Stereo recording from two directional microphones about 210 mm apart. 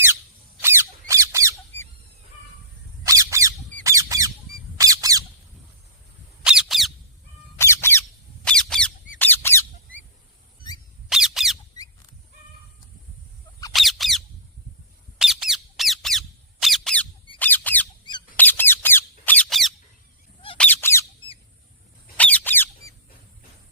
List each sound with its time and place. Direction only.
0.6 s squeak: 10° right (ahead or behind)
3.1 s squeak: 15° right (ahead or behind)
6.4 s squeak: 5° right (ahead or behind)
7.6 s squeak: 10° left (ahead or behind)
11.1 s squeak: centre (ahead or behind)
13.7 s squeak: centre (ahead or behind)
15.2 s squeak: centre (ahead or behind)
22.2 s squeak: 5° left (ahead or behind)